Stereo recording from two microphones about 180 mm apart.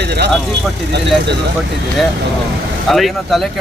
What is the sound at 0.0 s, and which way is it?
Vehicle, 70° right (ahead or behind).